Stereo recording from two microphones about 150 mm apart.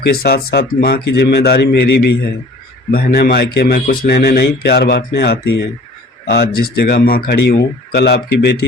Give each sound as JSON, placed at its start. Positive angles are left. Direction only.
{"t": 0.1, "sound": "speech", "side_deg": 90}